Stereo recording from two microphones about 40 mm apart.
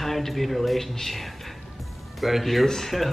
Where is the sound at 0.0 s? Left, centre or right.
Centre.